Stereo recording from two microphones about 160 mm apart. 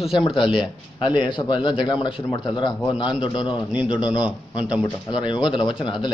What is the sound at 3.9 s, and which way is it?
A man's voice, 5° right (ahead or behind).